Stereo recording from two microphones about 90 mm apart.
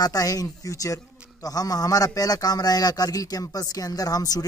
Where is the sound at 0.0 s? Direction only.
40° left (ahead or behind).